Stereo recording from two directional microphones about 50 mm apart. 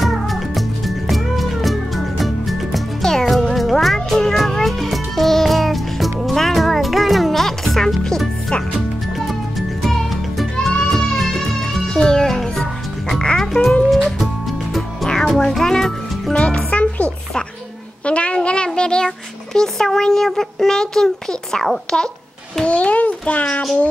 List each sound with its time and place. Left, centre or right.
0.0 s music: centre
9.3 s music: centre
13.4 s music: centre
15.3 s music: centre
16.3 s music: left
18.0 s a sound: left
22.7 s a sound: left